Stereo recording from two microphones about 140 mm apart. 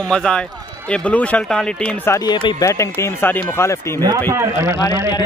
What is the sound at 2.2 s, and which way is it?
Speech, 25° left (ahead or behind).